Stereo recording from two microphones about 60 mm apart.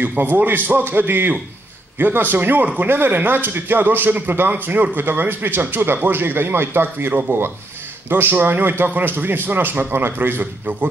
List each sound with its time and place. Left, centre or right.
0.0 s a man's voice: right